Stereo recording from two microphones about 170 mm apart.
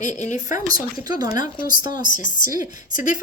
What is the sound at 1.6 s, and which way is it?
Speech, 55° left (ahead or behind).